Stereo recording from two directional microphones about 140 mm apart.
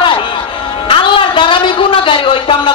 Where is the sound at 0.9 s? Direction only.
40° left (ahead or behind).